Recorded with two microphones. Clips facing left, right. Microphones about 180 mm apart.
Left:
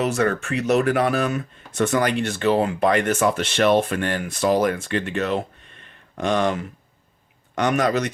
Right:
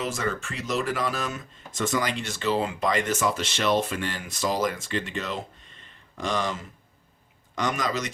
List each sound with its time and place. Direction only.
0.0 s speech: 65° left (ahead or behind)